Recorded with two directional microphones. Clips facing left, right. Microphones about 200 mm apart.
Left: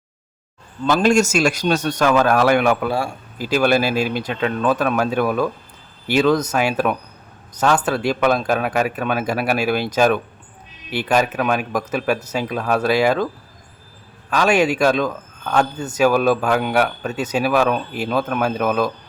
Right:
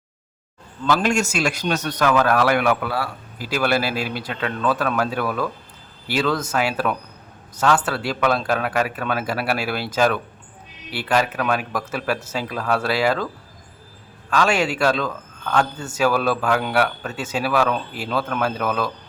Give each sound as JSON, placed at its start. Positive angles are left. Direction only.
{"t": 1.0, "sound": "speech", "side_deg": 40}
{"t": 14.3, "sound": "a man's voice", "side_deg": 15}